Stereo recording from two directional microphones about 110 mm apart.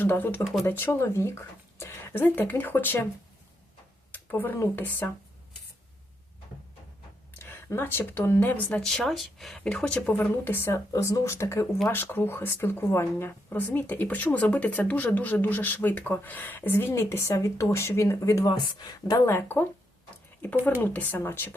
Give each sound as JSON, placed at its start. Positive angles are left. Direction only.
{"t": 0.0, "sound": "speech", "side_deg": 15}
{"t": 4.1, "sound": "speech", "side_deg": 15}
{"t": 7.3, "sound": "speech", "side_deg": 20}
{"t": 18.4, "sound": "speech", "side_deg": 35}
{"t": 19.3, "sound": "speech", "side_deg": 20}